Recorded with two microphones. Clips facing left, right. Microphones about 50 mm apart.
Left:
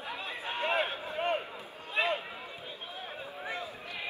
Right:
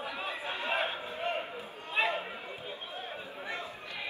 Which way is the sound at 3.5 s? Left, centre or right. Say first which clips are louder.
Even; right.